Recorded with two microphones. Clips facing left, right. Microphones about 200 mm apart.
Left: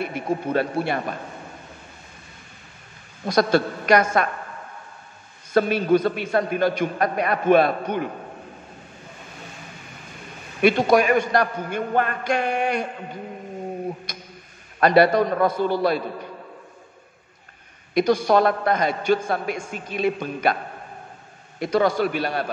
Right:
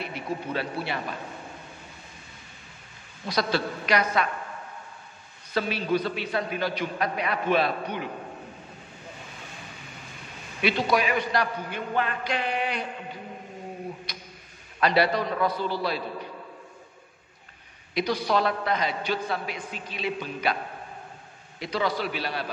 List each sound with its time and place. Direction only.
0.0 s a man's voice: 50° left (ahead or behind)
3.3 s a man's voice: 50° left (ahead or behind)
5.5 s a man's voice: 50° left (ahead or behind)
10.6 s a man's voice: 50° left (ahead or behind)
14.1 s tick: 45° left (ahead or behind)
14.8 s a man's voice: 50° left (ahead or behind)
17.9 s a man's voice: 45° left (ahead or behind)
21.5 s a man's voice: 50° left (ahead or behind)